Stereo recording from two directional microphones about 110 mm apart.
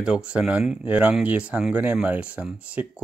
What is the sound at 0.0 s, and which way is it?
Speech, 10° right (ahead or behind).